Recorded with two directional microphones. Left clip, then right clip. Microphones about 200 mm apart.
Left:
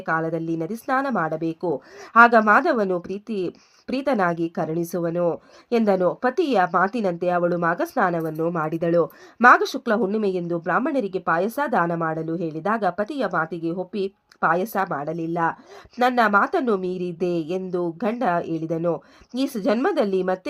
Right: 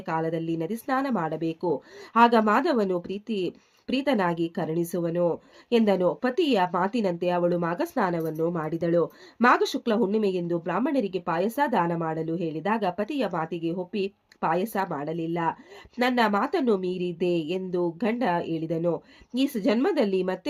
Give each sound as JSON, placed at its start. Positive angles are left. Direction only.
{"t": 0.0, "sound": "a woman's voice", "side_deg": 20}
{"t": 16.9, "sound": "a sound", "side_deg": 50}
{"t": 17.5, "sound": "a woman's voice", "side_deg": 20}